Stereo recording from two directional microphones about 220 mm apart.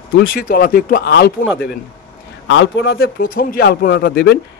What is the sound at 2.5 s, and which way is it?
Speech, 60° left (ahead or behind).